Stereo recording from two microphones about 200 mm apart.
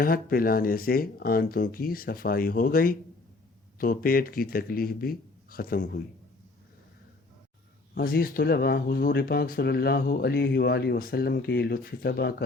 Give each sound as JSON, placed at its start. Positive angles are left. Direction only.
{"t": 0.0, "sound": "speech", "side_deg": 45}
{"t": 7.9, "sound": "speech", "side_deg": 45}